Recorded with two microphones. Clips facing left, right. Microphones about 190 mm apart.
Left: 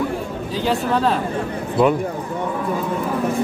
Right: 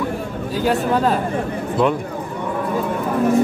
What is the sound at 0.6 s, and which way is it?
Speech, 5° right (ahead or behind).